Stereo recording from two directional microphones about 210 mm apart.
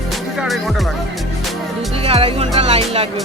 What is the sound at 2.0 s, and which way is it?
Speech, 30° right (ahead or behind).